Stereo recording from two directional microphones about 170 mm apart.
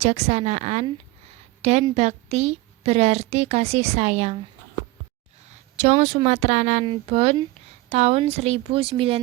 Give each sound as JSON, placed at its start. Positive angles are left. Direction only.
{"t": 0.0, "sound": "a woman's voice", "side_deg": -40}
{"t": 5.7, "sound": "a woman's voice", "side_deg": -40}
{"t": 6.8, "sound": "a woman's voice", "side_deg": -30}